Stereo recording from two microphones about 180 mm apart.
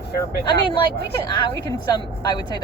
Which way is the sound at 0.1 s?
60° left (ahead or behind).